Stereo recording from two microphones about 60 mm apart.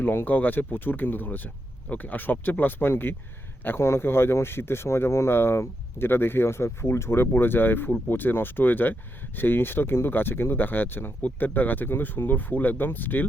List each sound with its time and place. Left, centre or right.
0.0 s a man's voice: left